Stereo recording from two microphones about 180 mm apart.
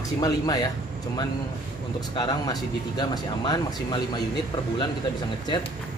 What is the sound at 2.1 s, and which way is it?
Speech, 20° left (ahead or behind).